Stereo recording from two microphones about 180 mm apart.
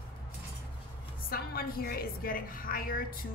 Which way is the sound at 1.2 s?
55° left (ahead or behind).